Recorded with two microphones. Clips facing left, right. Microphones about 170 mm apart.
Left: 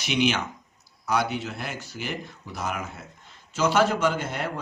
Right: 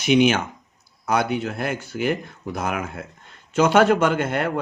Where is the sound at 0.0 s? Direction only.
50° right (ahead or behind).